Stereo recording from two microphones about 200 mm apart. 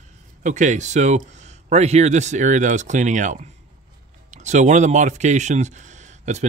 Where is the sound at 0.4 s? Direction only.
40° right (ahead or behind).